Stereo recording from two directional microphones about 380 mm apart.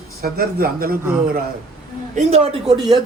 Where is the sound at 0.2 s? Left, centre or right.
Right.